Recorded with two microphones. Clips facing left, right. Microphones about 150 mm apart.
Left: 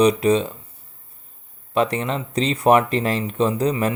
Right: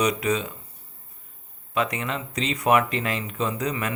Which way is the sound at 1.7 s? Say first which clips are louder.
Left 6 dB; 30° left (ahead or behind).